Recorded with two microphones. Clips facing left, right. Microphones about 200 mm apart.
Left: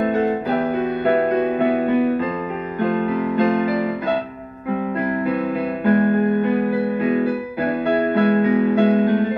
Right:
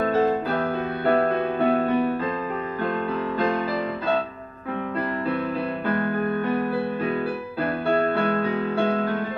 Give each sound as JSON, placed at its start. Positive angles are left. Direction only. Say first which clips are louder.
{"t": 0.0, "sound": "music", "louder": "left 2 dB", "side_deg": 20}
{"t": 3.3, "sound": "music", "louder": "left 6 dB", "side_deg": 20}
{"t": 5.9, "sound": "music", "louder": "left 9 dB", "side_deg": 20}